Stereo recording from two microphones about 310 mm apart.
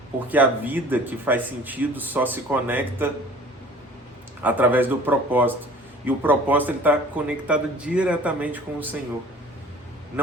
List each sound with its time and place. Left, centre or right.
0.3 s speech: centre
4.4 s speech: centre